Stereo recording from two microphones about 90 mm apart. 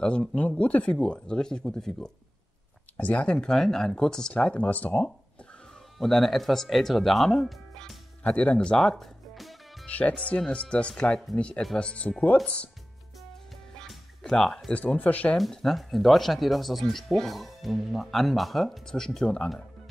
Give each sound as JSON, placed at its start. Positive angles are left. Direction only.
{"t": 0.4, "sound": "speech", "side_deg": 15}
{"t": 5.9, "sound": "speech", "side_deg": 0}
{"t": 8.2, "sound": "speech", "side_deg": 15}
{"t": 9.8, "sound": "speech", "side_deg": 15}
{"t": 13.7, "sound": "music", "side_deg": 5}
{"t": 14.7, "sound": "speech", "side_deg": 15}
{"t": 15.3, "sound": "speech", "side_deg": 0}